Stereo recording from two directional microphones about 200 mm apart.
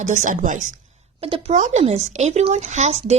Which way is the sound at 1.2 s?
30° right (ahead or behind).